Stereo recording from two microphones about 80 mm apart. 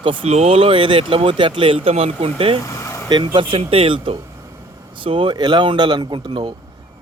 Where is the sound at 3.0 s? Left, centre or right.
Right.